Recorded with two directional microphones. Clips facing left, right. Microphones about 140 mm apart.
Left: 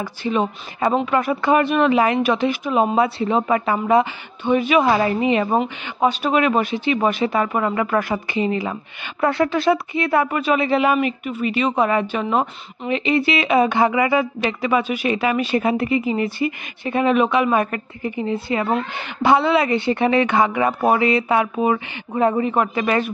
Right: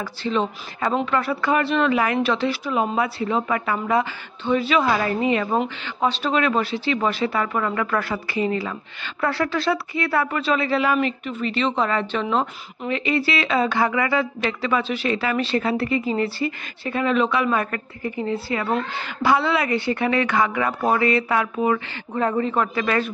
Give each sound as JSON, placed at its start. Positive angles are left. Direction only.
{"t": 0.0, "sound": "speech", "side_deg": 15}